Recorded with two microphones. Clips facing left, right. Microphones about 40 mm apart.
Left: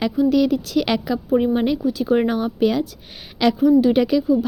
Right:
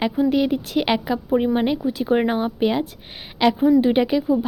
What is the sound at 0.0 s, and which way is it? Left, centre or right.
A woman's voice, right.